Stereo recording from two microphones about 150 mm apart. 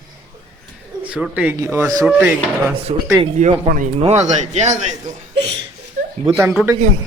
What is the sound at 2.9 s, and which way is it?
Speech, 40° right (ahead or behind).